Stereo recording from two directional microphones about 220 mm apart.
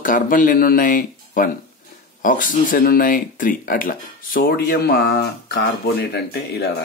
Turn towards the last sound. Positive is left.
turn(degrees=45)  # may be behind; listen again after turning